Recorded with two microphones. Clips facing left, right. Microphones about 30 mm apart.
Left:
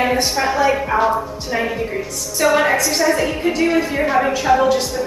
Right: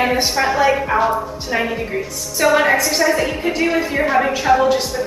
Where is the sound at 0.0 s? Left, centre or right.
Centre.